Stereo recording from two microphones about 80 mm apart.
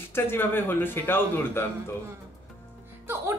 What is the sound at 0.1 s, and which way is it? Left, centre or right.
Speech, left.